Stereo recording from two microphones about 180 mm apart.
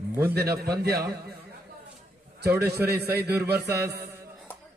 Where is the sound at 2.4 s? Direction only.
60° right (ahead or behind).